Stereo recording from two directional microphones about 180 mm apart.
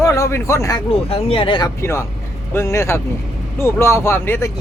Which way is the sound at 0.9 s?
35° left (ahead or behind).